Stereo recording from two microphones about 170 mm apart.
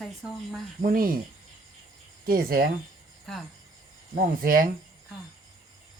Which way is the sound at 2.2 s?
60° right (ahead or behind).